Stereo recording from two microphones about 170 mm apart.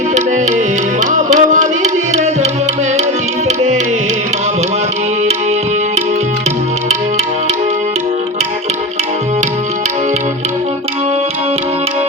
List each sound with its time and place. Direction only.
1.1 s music: 45° right (ahead or behind)